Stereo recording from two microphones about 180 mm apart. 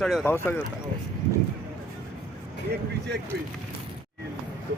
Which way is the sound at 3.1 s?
70° right (ahead or behind).